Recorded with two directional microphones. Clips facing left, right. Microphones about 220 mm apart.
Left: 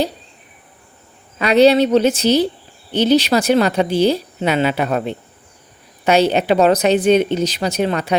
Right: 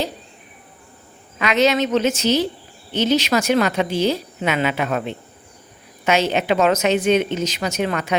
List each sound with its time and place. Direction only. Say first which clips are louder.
1.4 s speech: left 6 dB; 35° left (ahead or behind)